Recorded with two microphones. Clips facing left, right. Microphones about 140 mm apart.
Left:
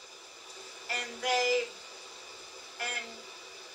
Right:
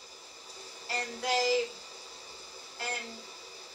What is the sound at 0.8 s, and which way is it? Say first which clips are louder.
Speech: even; 30° right (ahead or behind).